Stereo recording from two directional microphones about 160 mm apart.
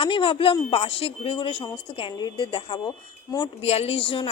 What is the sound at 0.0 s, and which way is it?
A woman's voice, 35° left (ahead or behind).